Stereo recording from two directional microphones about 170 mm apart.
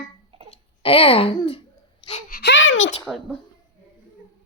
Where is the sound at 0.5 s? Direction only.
35° left (ahead or behind).